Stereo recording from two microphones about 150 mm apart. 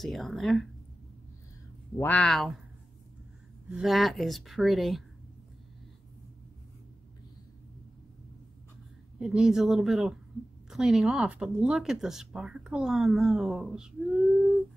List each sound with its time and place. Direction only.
0.0 s speech: centre (ahead or behind)
2.0 s speech: 10° left (ahead or behind)
3.7 s speech: centre (ahead or behind)
9.2 s speech: 5° right (ahead or behind)